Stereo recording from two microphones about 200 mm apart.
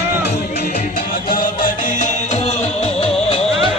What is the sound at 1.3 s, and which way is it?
Music, 45° left (ahead or behind).